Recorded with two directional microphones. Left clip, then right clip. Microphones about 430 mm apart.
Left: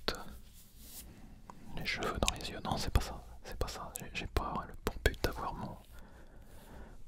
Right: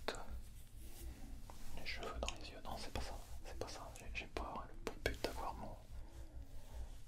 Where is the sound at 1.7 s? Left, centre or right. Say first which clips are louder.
Left 11 dB; left.